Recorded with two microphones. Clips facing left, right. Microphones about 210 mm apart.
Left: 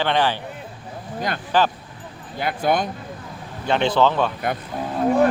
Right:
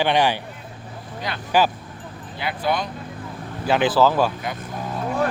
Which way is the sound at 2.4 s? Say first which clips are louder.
Left 3 dB; 50° left (ahead or behind).